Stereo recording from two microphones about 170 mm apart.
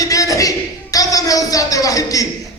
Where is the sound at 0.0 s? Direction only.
20° left (ahead or behind).